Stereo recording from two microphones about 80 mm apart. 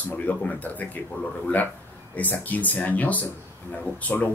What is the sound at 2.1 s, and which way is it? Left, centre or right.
Speech, centre.